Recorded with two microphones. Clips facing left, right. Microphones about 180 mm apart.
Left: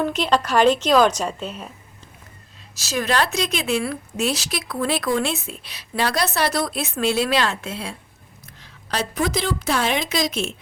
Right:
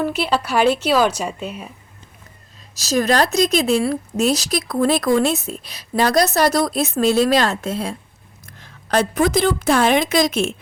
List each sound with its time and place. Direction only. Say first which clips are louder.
0.0 s a woman's voice: even; 10° right (ahead or behind)
2.7 s a woman's voice: right 5 dB; 40° right (ahead or behind)